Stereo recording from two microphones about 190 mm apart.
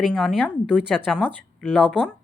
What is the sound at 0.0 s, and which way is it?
A woman's voice, 5° left (ahead or behind).